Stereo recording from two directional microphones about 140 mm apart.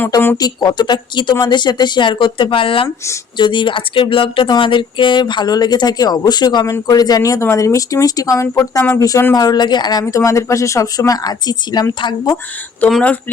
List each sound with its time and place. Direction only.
0.3 s speech: 30° left (ahead or behind)
12.9 s speech: 5° left (ahead or behind)